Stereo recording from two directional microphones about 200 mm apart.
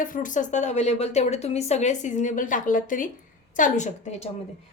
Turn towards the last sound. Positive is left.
turn(degrees=35)  # may be behind; listen again after turning